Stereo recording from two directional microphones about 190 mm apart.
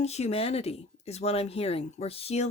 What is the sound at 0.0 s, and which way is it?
Speech, 35° left (ahead or behind).